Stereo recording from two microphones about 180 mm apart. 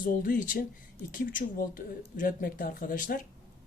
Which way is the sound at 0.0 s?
50° left (ahead or behind).